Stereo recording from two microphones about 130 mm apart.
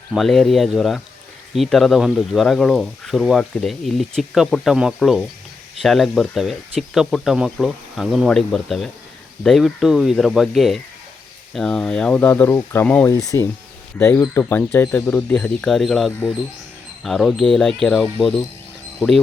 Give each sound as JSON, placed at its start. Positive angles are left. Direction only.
{"t": 0.1, "sound": "speech", "side_deg": 0}
{"t": 13.1, "sound": "speech", "side_deg": 25}